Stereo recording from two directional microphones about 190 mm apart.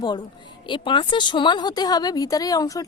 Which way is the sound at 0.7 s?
25° left (ahead or behind).